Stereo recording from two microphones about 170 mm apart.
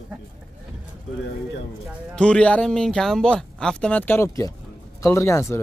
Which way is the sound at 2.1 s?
5° left (ahead or behind).